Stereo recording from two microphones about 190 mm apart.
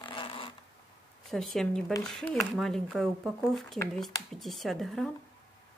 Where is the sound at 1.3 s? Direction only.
Centre (ahead or behind).